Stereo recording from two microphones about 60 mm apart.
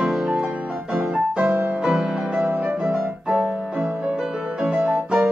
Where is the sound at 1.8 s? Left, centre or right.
Centre.